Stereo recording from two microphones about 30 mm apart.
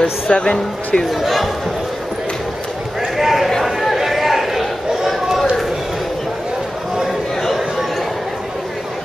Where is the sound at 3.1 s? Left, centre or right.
Centre.